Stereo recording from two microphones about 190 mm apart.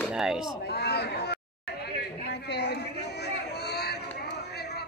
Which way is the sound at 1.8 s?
60° left (ahead or behind).